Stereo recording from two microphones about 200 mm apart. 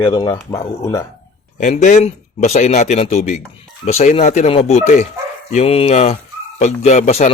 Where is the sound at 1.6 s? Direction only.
35° left (ahead or behind).